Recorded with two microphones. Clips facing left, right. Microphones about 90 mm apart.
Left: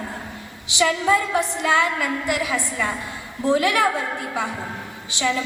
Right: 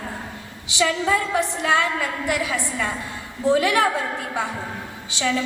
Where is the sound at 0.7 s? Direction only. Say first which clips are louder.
Left 2 dB; 20° left (ahead or behind).